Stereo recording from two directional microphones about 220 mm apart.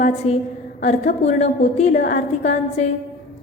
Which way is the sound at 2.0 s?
45° left (ahead or behind).